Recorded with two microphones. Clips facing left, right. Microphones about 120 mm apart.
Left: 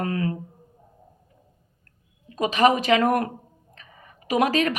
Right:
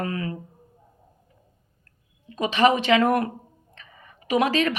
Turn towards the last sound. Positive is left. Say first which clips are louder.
# even
turn(degrees=40)  # may be behind; listen again after turning